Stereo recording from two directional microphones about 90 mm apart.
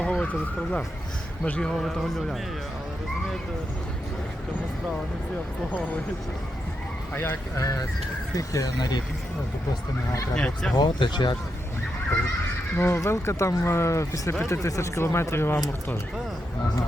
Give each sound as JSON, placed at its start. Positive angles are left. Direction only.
{"t": 0.0, "sound": "vehicle", "side_deg": 15}
{"t": 1.5, "sound": "speech", "side_deg": 10}
{"t": 7.1, "sound": "speech", "side_deg": 20}
{"t": 7.5, "sound": "speech", "side_deg": 35}
{"t": 10.3, "sound": "speech", "side_deg": 10}
{"t": 10.8, "sound": "speech", "side_deg": 60}
{"t": 12.7, "sound": "speech", "side_deg": 25}